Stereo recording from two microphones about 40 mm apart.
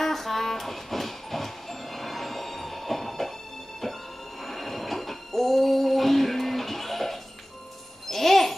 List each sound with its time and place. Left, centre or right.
0.0 s train: centre
4.5 s a sound: centre
8.1 s music: centre